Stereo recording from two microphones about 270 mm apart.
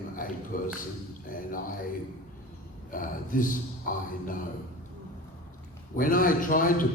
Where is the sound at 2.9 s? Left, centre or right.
Left.